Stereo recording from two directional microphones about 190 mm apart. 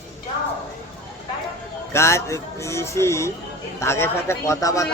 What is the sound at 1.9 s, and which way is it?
A man's voice, 15° left (ahead or behind).